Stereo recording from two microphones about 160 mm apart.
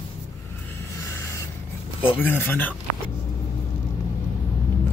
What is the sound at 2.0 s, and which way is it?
Speech, 10° left (ahead or behind).